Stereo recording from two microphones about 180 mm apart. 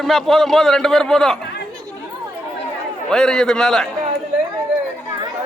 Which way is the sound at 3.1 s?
5° left (ahead or behind).